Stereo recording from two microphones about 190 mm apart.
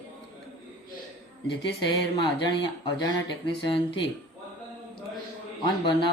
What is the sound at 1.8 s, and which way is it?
Speech, 25° left (ahead or behind).